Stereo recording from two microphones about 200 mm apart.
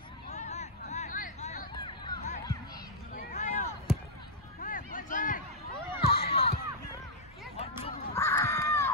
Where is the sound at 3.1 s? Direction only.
40° left (ahead or behind).